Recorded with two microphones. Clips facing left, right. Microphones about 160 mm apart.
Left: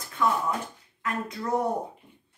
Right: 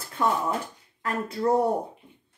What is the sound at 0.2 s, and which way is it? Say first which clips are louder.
Speech: right 1 dB; 35° right (ahead or behind).